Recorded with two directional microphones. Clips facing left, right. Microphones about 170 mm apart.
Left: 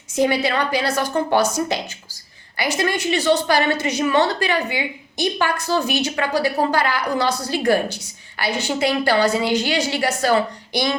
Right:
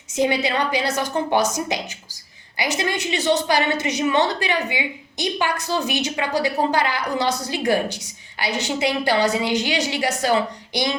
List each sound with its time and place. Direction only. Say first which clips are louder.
0.2 s a woman's voice: left 2 dB; 20° right (ahead or behind)